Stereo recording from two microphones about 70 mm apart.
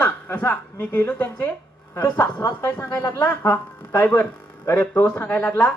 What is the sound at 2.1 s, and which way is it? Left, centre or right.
A woman's voice, left.